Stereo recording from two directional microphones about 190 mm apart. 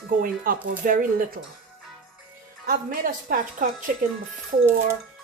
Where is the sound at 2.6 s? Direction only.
45° right (ahead or behind).